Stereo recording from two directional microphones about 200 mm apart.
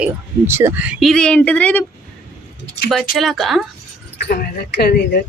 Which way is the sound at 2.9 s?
Centre (ahead or behind).